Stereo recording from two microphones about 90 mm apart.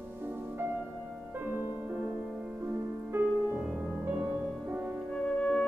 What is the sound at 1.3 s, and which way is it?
Music, 20° right (ahead or behind).